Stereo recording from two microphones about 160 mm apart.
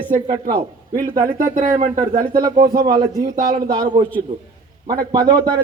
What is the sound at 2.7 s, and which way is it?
A man's voice, 25° right (ahead or behind).